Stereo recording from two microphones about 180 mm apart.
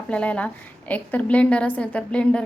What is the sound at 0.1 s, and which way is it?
A woman's voice, 5° left (ahead or behind).